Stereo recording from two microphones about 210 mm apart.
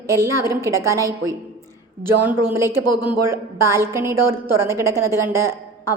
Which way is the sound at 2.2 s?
10° right (ahead or behind).